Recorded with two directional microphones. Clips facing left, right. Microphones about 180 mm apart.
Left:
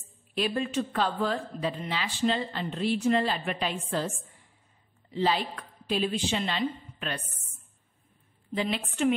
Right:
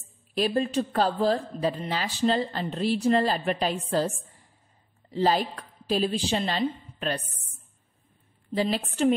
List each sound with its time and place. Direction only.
0.3 s speech: 35° right (ahead or behind)
5.1 s a woman's voice: 40° right (ahead or behind)
8.5 s speech: 35° right (ahead or behind)